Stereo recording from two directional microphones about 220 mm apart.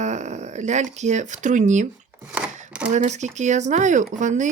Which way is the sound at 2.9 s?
30° right (ahead or behind).